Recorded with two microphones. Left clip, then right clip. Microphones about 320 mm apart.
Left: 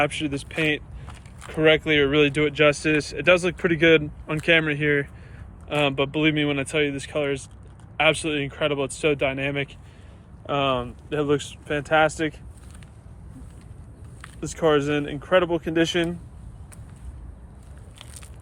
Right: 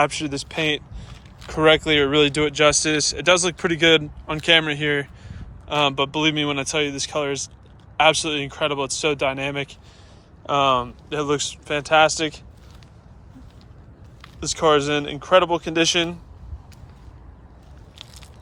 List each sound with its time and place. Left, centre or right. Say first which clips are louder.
0.3 s speech: right 1 dB; centre
14.2 s speech: right 3 dB; centre